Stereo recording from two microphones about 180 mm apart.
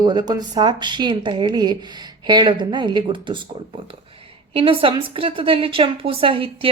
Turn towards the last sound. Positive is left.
turn(degrees=-30)  # may be behind; listen again after turning